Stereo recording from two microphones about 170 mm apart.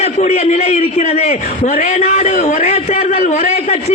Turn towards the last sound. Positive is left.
turn(degrees=45)  # may be behind; listen again after turning